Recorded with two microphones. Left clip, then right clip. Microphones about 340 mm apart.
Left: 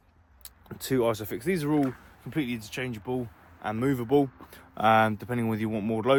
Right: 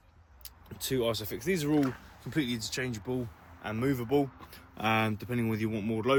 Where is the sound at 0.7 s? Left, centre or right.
Centre.